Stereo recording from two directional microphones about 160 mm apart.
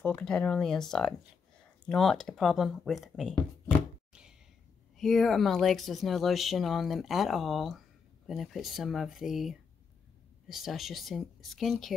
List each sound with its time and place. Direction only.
0.0 s speech: 5° left (ahead or behind)
4.9 s speech: 5° left (ahead or behind)